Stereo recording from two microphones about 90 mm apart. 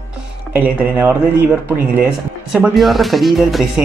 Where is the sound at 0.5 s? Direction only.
20° right (ahead or behind).